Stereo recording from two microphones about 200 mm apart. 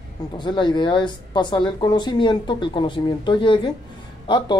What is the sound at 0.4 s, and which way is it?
Speech, 25° left (ahead or behind).